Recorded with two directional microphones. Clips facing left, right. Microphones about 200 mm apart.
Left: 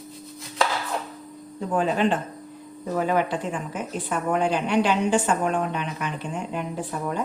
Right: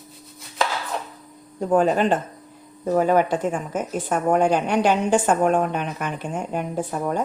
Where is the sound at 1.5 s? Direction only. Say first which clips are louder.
Right 5 dB; 45° right (ahead or behind).